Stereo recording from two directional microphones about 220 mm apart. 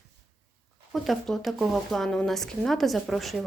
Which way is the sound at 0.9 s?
Centre (ahead or behind).